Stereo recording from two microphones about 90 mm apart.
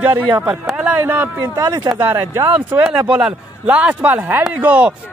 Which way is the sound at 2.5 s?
10° right (ahead or behind).